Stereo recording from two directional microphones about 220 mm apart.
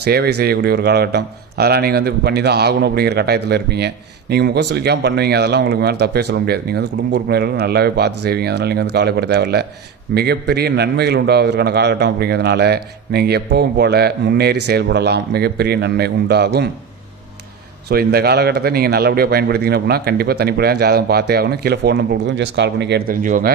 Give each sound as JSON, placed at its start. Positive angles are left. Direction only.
{"t": 0.0, "sound": "speech", "side_deg": -45}
{"t": 17.8, "sound": "speech", "side_deg": -45}